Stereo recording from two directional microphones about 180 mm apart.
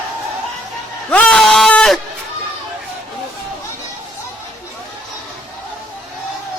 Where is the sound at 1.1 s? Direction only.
5° left (ahead or behind).